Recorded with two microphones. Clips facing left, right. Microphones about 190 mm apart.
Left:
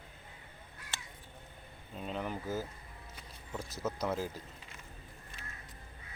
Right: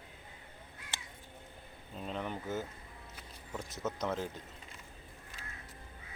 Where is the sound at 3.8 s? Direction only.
5° left (ahead or behind).